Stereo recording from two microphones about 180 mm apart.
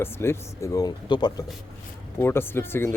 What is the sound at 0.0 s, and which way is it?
Speech, 15° left (ahead or behind).